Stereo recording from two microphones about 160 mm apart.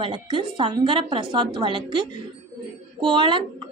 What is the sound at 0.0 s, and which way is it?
A woman's voice, 30° right (ahead or behind).